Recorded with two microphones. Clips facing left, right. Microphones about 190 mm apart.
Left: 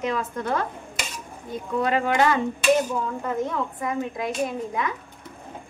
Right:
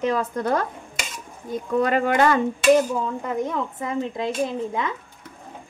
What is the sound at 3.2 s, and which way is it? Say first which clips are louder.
Speech: right 1 dB; 20° right (ahead or behind).